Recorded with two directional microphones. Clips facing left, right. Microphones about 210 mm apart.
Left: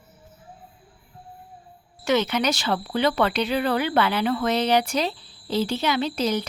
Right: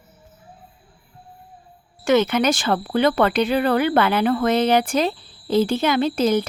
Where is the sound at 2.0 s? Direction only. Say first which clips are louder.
Right 5 dB; 50° right (ahead or behind).